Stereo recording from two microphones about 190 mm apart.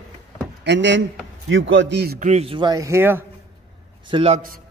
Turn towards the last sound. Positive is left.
turn(degrees=-30)  # may be behind; listen again after turning